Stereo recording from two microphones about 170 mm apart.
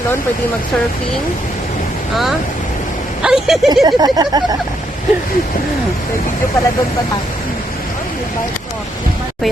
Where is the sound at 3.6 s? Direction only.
25° right (ahead or behind).